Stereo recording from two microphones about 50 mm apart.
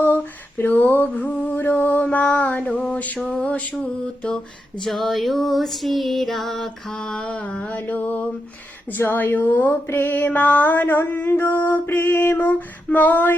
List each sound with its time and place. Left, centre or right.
0.6 s mantra: left; by 4.4 s centre
4.8 s female singing: centre
7.2 s mantra: left
8.9 s music: left
12.0 s a sound: left
12.4 s music: left